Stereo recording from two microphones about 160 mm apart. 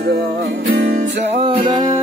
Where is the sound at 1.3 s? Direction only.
35° right (ahead or behind).